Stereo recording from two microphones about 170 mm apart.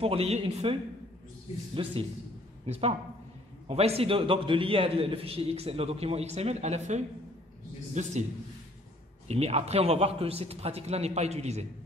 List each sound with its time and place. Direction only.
0.0 s a man's voice: 35° right (ahead or behind)
1.8 s a man's voice: 30° right (ahead or behind)
9.3 s a man's voice: 40° right (ahead or behind)